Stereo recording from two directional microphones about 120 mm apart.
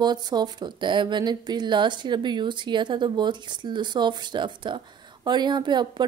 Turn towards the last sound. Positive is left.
turn(degrees=-40)  # may be behind; listen again after turning